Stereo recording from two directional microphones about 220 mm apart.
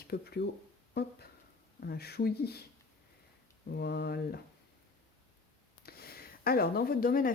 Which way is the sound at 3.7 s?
50° left (ahead or behind).